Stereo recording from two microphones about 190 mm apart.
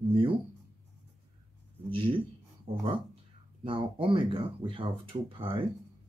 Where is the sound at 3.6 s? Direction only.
30° right (ahead or behind).